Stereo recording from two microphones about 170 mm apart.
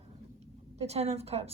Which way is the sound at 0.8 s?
40° right (ahead or behind).